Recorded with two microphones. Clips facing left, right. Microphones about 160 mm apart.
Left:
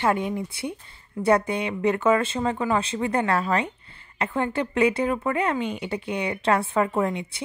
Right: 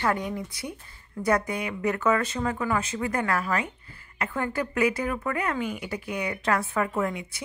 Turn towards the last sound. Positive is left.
turn(degrees=25)  # may be behind; listen again after turning